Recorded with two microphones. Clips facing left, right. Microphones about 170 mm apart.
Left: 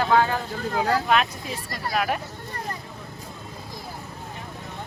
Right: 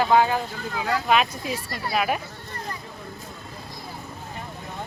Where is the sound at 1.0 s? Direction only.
5° right (ahead or behind).